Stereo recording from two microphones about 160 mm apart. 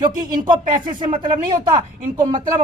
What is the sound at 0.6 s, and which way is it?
Speech, 55° right (ahead or behind).